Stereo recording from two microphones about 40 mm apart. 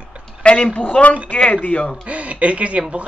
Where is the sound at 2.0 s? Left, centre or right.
Right.